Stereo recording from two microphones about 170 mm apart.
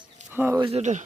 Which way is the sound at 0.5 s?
35° right (ahead or behind).